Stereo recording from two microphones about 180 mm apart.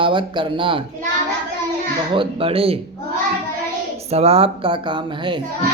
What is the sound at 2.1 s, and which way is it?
Speech, 30° right (ahead or behind).